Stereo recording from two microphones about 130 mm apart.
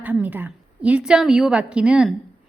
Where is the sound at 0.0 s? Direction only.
10° right (ahead or behind).